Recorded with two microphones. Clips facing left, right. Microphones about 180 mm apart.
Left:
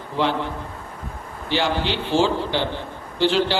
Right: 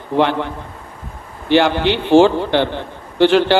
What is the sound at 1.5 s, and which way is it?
A man's voice, 60° right (ahead or behind).